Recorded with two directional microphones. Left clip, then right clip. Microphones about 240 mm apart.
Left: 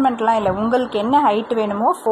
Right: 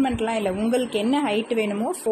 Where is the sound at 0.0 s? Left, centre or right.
Centre.